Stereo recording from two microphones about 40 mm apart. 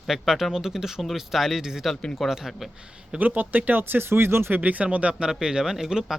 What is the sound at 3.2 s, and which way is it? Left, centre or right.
Speech, right.